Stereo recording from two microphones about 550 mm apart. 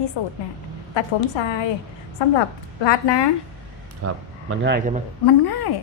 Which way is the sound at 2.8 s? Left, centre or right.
Left.